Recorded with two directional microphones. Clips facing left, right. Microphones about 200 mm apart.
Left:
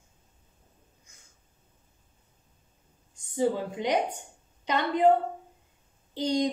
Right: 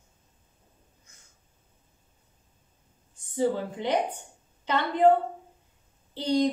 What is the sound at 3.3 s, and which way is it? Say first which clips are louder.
Speech: even; 15° left (ahead or behind).